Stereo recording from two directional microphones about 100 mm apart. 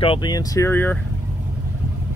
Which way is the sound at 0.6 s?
20° left (ahead or behind).